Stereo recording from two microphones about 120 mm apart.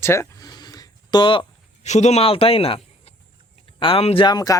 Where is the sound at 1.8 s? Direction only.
70° left (ahead or behind); by 4.2 s 50° left (ahead or behind).